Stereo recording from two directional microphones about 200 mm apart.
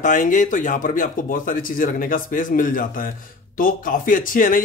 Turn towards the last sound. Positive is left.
turn(degrees=45)  # may be behind; listen again after turning